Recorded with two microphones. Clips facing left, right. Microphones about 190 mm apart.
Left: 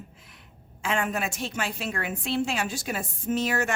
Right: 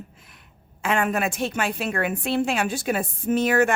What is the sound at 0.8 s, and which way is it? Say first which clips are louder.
A woman's voice: right 5 dB; 60° right (ahead or behind).